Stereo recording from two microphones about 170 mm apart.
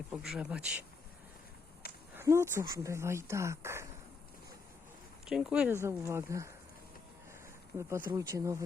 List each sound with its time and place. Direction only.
0.1 s speech: 5° right (ahead or behind)
2.1 s speech: 15° right (ahead or behind)
5.2 s speech: 5° right (ahead or behind)
7.8 s speech: 15° right (ahead or behind)